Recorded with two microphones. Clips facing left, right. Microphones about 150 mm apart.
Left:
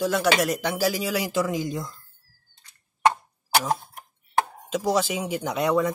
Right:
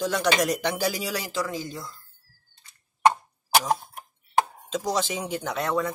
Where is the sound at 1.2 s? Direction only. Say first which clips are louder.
Left 5 dB; 15° left (ahead or behind).